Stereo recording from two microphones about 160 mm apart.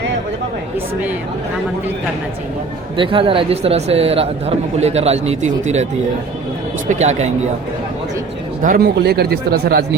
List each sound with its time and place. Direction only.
3.0 s speech: 35° right (ahead or behind)
8.6 s speech: 75° right (ahead or behind)